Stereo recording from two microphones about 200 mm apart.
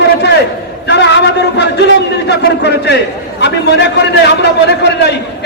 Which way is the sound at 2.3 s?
60° left (ahead or behind).